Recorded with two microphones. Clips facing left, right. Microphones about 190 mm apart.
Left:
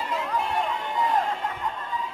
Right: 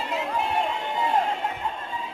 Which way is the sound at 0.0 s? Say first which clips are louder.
Right 1 dB; 25° right (ahead or behind).